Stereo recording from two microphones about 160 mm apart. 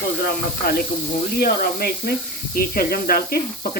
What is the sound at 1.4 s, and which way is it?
Speech, 70° left (ahead or behind).